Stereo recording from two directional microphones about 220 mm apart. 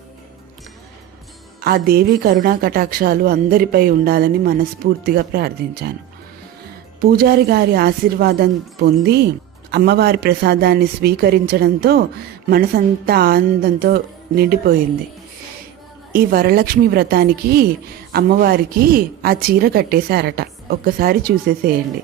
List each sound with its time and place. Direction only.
1.6 s a woman's voice: 45° right (ahead or behind)
7.0 s a woman's voice: 45° right (ahead or behind)
16.1 s a woman's voice: 40° right (ahead or behind)